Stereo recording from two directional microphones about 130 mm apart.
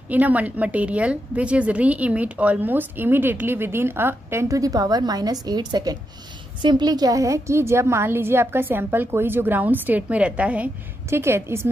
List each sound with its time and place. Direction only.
0.1 s a woman's voice: 10° right (ahead or behind)